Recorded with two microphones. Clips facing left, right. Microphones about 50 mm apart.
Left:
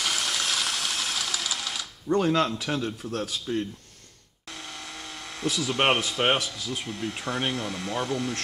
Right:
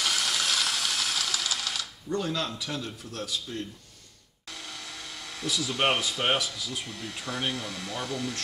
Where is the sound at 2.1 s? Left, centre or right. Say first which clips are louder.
Left 8 dB; left.